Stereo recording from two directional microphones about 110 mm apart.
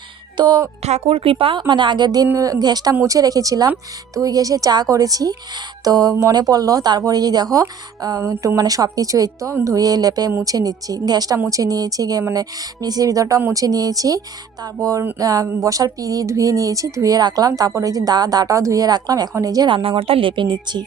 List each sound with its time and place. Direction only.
0.3 s speech: 40° right (ahead or behind)
0.8 s a woman's voice: 80° right; by 2.2 s 40° right (ahead or behind)
2.2 s speech: 25° right (ahead or behind)
19.7 s a woman's voice: 55° right (ahead or behind)